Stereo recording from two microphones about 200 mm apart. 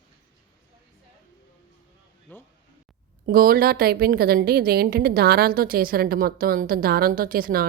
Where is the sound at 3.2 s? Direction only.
45° right (ahead or behind).